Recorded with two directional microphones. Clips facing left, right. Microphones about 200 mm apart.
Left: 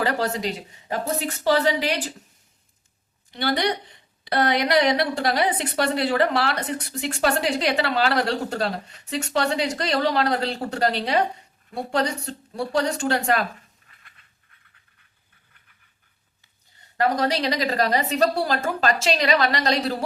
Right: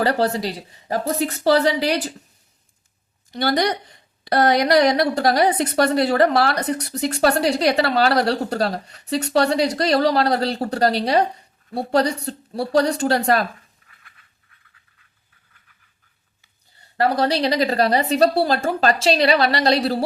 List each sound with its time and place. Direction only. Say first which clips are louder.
0.0 s a woman's voice: right 4 dB; 35° right (ahead or behind)
3.3 s a woman's voice: right 3 dB; 45° right (ahead or behind)
17.0 s a woman's voice: right 3 dB; 35° right (ahead or behind)